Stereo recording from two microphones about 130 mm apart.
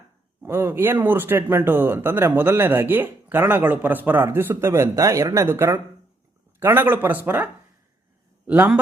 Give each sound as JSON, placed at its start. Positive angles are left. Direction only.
{"t": 0.4, "sound": "speech", "side_deg": -20}